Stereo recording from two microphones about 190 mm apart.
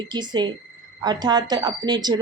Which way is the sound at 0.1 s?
25° right (ahead or behind).